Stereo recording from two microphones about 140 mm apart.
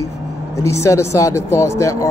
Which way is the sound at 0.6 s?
20° left (ahead or behind).